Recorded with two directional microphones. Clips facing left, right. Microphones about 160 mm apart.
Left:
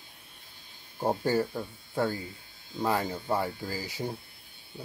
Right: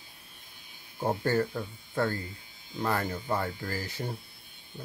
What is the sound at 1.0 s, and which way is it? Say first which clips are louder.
Speech: left 1 dB; 10° left (ahead or behind).